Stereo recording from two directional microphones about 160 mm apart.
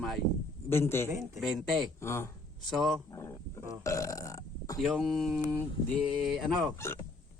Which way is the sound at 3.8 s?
20° left (ahead or behind).